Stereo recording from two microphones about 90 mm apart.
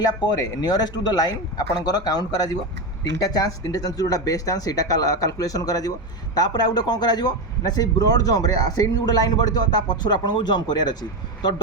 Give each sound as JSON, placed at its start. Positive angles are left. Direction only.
{"t": 0.0, "sound": "speech", "side_deg": 50}